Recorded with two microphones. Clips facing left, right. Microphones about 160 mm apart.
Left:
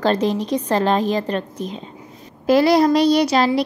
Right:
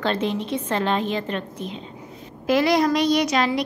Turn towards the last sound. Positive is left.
turn(degrees=35)  # may be behind; listen again after turning